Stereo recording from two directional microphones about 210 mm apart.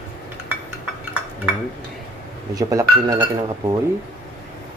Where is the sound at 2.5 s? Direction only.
15° right (ahead or behind).